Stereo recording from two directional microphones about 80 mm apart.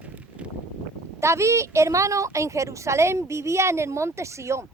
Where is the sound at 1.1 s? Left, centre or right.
Right.